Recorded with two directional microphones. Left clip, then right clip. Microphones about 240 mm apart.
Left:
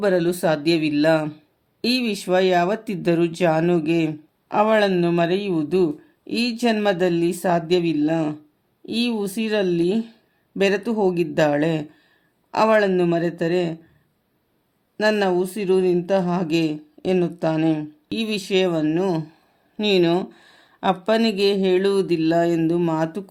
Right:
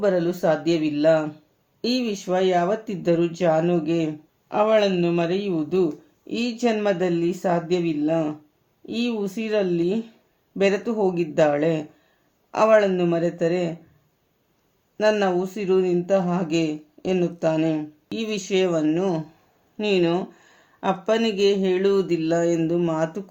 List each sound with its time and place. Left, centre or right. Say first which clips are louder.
0.0 s speech: left 1 dB; left
14.9 s speech: left 1 dB; left
19.7 s a sound: left 3 dB; left
21.1 s speech: even; left